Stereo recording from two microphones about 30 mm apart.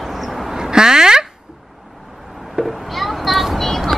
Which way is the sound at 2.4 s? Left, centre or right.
Centre.